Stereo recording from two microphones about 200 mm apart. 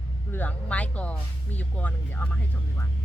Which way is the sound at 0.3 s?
10° left (ahead or behind).